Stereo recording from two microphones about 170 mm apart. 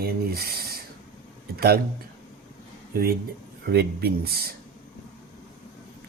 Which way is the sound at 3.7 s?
70° right (ahead or behind).